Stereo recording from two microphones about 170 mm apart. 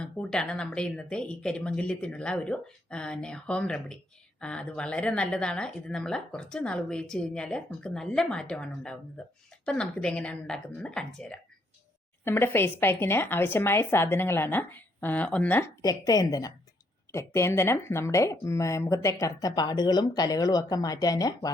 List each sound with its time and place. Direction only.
0.0 s a woman's voice: 5° left (ahead or behind); by 21.5 s 20° left (ahead or behind)